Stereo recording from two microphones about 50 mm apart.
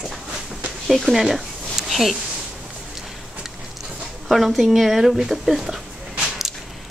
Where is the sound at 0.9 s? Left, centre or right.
Centre.